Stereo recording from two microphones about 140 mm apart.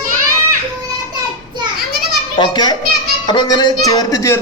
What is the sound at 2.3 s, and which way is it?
A child's voice, 35° left (ahead or behind).